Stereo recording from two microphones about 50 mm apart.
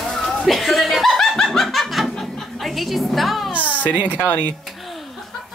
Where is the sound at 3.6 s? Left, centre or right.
Left.